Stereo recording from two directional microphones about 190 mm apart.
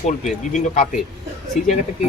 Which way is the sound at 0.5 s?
40° left (ahead or behind).